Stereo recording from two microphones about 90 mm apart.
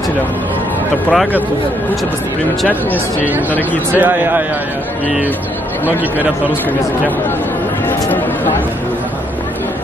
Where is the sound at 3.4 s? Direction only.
20° left (ahead or behind).